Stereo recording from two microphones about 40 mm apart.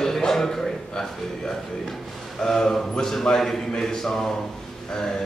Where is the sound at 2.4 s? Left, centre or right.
Centre.